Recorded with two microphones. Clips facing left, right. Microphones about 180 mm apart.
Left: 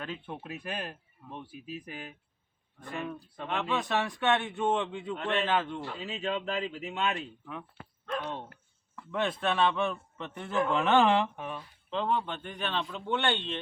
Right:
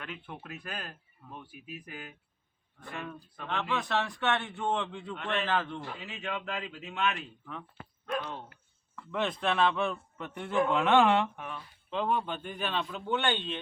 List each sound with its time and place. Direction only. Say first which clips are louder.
0.0 s speech: left 4 dB; 30° left (ahead or behind)
2.9 s speech: left 4 dB; 10° left (ahead or behind)
6.0 s speech: left 5 dB; 30° left (ahead or behind)
9.1 s a man's voice: even; centre (ahead or behind)
11.3 s speech: left 3 dB; 20° left (ahead or behind)
11.9 s a man's voice: even; 5° right (ahead or behind)